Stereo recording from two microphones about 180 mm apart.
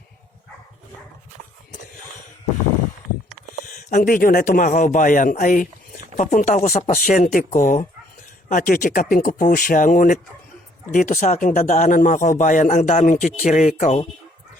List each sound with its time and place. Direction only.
3.7 s speech: 45° left (ahead or behind)